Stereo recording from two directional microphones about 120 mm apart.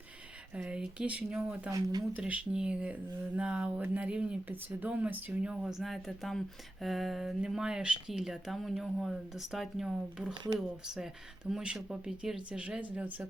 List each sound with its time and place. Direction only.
0.5 s speech: 10° right (ahead or behind)
1.7 s speech: 35° right (ahead or behind)
2.1 s speech: 10° right (ahead or behind)